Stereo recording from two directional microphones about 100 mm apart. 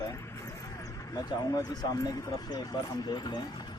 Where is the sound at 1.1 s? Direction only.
30° left (ahead or behind).